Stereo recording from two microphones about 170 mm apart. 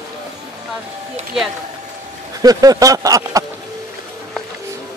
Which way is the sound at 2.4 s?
20° right (ahead or behind).